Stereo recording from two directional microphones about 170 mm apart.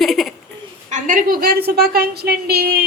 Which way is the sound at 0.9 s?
50° right (ahead or behind).